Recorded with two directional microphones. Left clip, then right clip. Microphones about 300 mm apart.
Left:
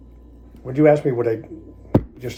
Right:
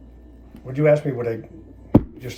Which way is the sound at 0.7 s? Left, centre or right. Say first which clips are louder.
Left 3 dB; left.